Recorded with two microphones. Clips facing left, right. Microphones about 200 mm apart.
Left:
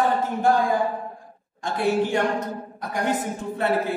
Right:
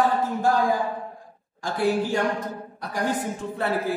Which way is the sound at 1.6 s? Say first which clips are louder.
Even; 25° left (ahead or behind).